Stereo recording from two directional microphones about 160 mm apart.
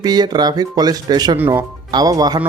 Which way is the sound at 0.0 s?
25° right (ahead or behind).